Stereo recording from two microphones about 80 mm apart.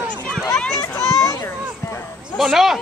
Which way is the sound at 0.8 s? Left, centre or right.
Left.